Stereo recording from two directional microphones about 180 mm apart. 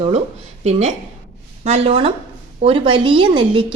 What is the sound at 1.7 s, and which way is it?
A woman's voice, 35° right (ahead or behind).